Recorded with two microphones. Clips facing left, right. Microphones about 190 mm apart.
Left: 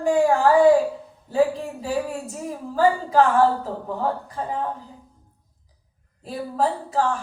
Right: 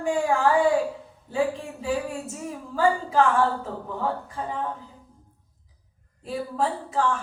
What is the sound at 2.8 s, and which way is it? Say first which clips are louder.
Speech: left 3 dB; 35° left (ahead or behind).